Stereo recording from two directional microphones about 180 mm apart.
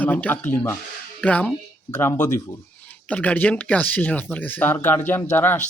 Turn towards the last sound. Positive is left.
turn(degrees=10)  # may be behind; listen again after turning